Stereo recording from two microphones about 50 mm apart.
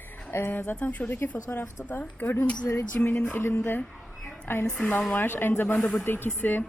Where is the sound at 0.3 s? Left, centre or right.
Left.